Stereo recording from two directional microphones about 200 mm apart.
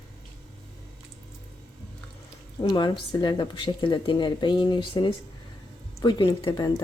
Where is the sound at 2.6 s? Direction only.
20° left (ahead or behind).